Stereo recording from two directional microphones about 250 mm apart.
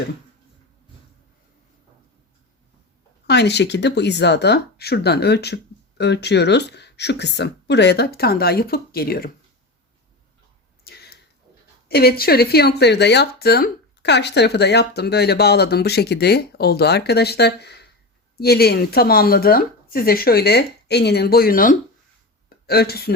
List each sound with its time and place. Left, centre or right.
3.2 s speech: left
10.8 s a sound: left
11.9 s speech: left